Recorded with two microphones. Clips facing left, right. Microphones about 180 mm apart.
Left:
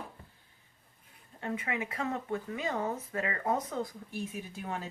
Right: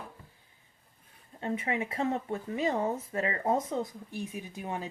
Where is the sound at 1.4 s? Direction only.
25° right (ahead or behind).